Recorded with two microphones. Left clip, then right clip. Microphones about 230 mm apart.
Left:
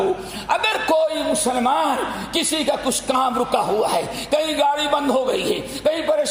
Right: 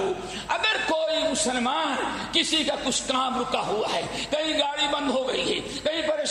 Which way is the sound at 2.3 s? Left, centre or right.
Left.